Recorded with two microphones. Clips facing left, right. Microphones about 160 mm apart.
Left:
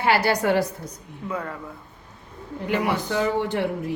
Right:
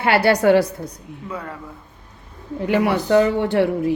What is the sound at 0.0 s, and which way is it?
Speech, 65° right (ahead or behind).